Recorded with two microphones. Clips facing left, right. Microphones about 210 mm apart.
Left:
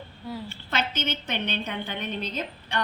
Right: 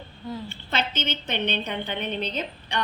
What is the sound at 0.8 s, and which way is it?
A woman's voice, 10° left (ahead or behind).